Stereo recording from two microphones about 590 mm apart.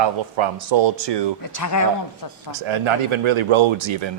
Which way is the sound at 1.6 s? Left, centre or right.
Left.